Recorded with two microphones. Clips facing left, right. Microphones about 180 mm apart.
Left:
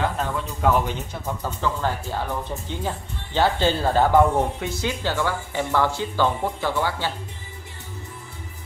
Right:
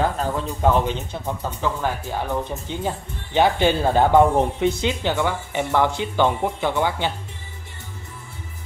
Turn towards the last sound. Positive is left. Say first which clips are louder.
# right 3 dB
turn(degrees=-20)  # may be behind; listen again after turning